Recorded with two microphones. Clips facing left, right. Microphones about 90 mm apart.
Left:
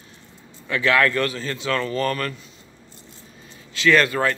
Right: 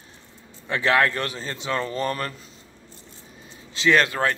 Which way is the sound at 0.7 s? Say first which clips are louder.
Left 1 dB; 30° right (ahead or behind).